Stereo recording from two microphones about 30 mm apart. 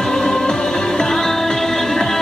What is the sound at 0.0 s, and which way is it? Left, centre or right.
Music, left.